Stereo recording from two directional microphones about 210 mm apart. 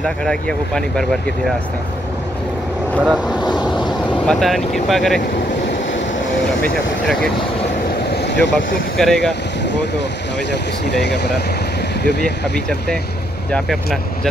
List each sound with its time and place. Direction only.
0.0 s speech: 5° left (ahead or behind)
3.0 s speech: 5° right (ahead or behind)
6.6 s speech: centre (ahead or behind)
8.1 s vehicle: 55° left (ahead or behind)
8.9 s speech: 5° left (ahead or behind)
9.7 s speech: 55° left (ahead or behind)
12.5 s speech: 5° left (ahead or behind)